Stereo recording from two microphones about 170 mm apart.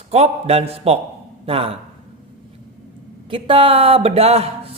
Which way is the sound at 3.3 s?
30° right (ahead or behind).